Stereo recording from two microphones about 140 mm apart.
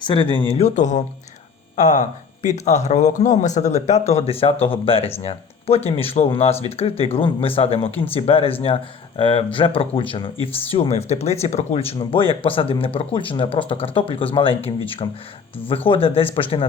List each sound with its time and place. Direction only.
0.0 s speech: 35° left (ahead or behind)